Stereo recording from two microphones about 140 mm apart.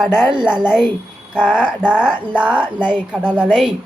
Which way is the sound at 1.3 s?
5° right (ahead or behind).